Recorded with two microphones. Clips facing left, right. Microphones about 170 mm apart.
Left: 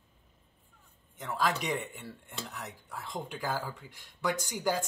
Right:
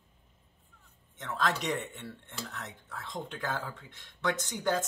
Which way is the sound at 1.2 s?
5° left (ahead or behind).